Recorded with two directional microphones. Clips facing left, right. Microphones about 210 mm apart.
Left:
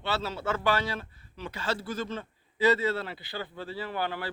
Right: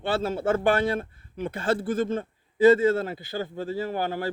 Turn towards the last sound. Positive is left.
turn(degrees=-45)  # may be behind; listen again after turning